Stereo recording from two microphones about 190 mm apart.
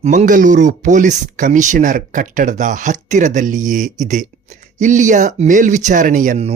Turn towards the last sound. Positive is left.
turn(degrees=-40)  # may be behind; listen again after turning